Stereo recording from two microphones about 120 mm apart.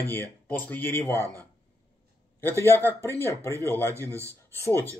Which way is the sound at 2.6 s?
20° left (ahead or behind).